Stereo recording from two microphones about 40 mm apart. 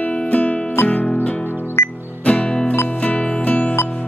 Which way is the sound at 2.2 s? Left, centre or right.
Left.